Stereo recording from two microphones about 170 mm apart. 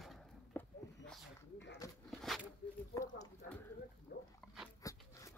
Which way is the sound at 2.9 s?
20° left (ahead or behind).